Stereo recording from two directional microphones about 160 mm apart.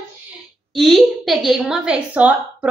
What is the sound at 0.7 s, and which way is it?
A woman's voice, centre (ahead or behind).